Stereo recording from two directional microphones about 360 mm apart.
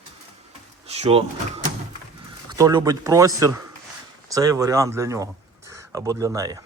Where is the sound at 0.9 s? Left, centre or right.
Centre.